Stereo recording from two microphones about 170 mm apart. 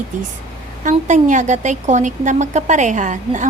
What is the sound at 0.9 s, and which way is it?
A woman's voice, 45° right (ahead or behind).